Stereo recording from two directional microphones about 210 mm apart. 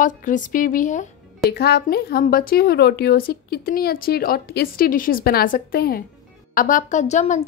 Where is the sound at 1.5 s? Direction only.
50° left (ahead or behind).